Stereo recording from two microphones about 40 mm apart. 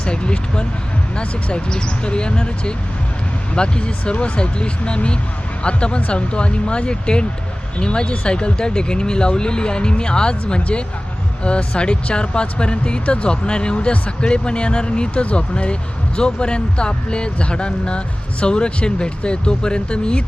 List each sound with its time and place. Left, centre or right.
0.0 s speech: left